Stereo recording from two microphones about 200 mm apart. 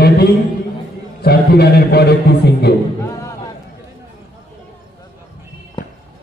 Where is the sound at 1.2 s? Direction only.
50° left (ahead or behind).